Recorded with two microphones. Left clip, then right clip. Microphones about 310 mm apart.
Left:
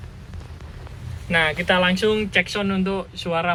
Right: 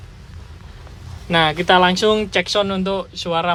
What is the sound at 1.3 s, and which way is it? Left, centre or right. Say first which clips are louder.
Speech: right 5 dB; right.